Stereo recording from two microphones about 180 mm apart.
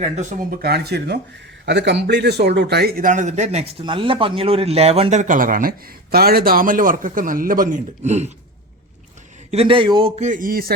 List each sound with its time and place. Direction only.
0.2 s a man's voice: 45° right (ahead or behind)
9.5 s speech: 30° right (ahead or behind)
10.2 s a man's voice: 45° right (ahead or behind)